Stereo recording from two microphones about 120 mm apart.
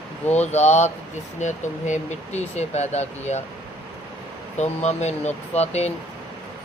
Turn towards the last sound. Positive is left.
turn(degrees=65)  # may be behind; listen again after turning